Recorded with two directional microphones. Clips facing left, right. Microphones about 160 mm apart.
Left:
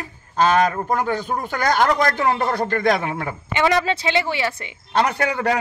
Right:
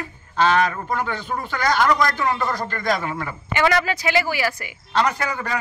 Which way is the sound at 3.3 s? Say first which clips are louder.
Left 1 dB; 20° left (ahead or behind).